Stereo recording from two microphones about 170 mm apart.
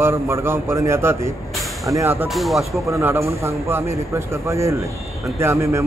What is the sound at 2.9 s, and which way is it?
A man's voice, 15° right (ahead or behind).